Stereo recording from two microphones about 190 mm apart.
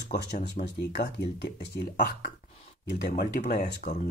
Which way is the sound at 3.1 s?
50° left (ahead or behind).